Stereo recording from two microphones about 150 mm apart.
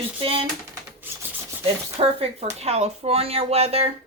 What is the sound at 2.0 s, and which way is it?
Speech, 40° right (ahead or behind).